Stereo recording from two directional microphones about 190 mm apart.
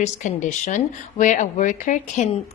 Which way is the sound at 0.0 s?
40° left (ahead or behind).